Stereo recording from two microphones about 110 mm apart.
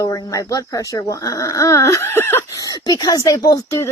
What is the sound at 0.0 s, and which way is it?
Speech, 35° left (ahead or behind).